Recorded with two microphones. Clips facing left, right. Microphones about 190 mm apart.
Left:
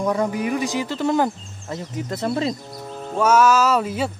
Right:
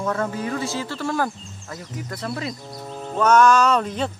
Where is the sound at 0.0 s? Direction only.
15° left (ahead or behind).